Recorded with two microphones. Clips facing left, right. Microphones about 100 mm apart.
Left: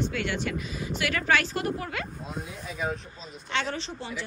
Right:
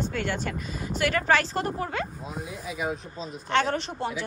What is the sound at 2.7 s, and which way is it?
Speech, 5° right (ahead or behind).